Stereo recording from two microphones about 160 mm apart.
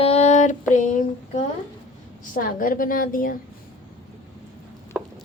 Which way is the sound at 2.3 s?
60° left (ahead or behind).